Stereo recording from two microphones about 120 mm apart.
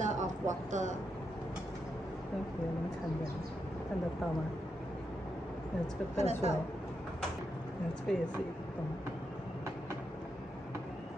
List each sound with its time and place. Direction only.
0.0 s a sound: 90° right
6.1 s a woman's voice: 70° right (ahead or behind)
8.1 s speech: 5° left (ahead or behind)